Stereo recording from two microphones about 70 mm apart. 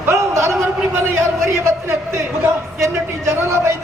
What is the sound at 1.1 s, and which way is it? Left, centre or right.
A man's voice, right.